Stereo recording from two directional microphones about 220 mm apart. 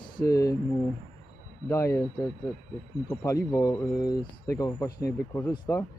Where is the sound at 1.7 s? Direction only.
15° left (ahead or behind).